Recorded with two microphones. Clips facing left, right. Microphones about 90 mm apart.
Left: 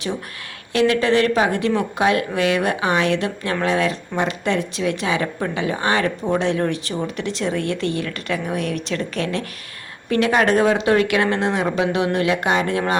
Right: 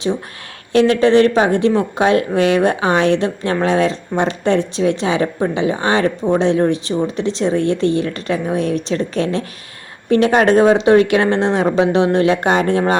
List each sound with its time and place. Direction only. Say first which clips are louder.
0.7 s speech: right 5 dB; 30° right (ahead or behind)